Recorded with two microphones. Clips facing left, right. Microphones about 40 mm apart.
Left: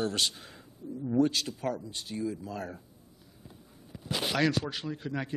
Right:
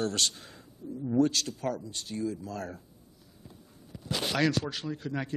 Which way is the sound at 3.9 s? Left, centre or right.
Centre.